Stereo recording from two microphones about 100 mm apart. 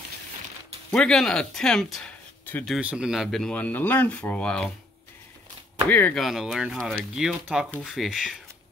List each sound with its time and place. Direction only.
0.9 s speech: 5° left (ahead or behind)
2.8 s speech: 10° right (ahead or behind)
3.5 s speech: 15° left (ahead or behind)
5.9 s speech: 20° left (ahead or behind)
6.1 s speech: centre (ahead or behind)